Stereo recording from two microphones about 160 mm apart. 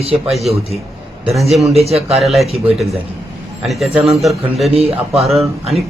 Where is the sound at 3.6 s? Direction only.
Centre (ahead or behind).